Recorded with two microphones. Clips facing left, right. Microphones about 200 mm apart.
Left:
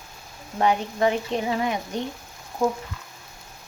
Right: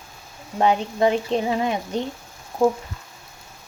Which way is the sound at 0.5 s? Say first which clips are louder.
Right 2 dB; 20° right (ahead or behind).